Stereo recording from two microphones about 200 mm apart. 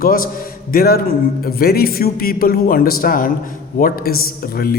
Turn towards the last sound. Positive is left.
turn(degrees=50)  # may be behind; listen again after turning